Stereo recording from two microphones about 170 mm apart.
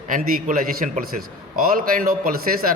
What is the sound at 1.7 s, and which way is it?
Speech, 55° right (ahead or behind).